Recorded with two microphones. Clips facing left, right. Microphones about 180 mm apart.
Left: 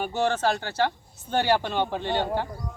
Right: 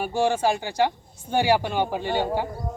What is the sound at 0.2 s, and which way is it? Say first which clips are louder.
A man's voice: right 3 dB; 10° right (ahead or behind).